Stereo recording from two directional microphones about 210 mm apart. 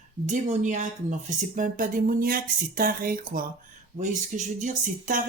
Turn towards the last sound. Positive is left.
turn(degrees=-40)  # may be behind; listen again after turning